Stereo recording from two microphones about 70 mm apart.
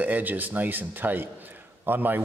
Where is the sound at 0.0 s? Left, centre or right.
Right.